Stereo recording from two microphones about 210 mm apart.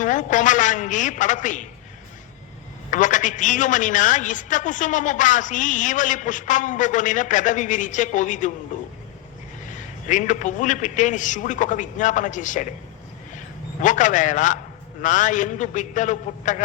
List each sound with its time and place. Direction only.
0.0 s a woman's voice: 35° left (ahead or behind)
2.9 s a woman's voice: 35° left (ahead or behind)
9.6 s a woman's voice: 35° left (ahead or behind)
13.8 s a woman's voice: 35° left (ahead or behind)